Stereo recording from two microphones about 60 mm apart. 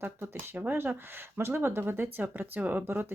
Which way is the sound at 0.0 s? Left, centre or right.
Right.